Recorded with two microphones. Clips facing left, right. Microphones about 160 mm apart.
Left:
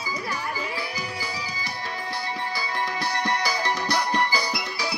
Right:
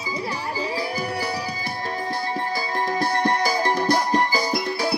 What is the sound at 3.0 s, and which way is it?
Music, 50° right (ahead or behind).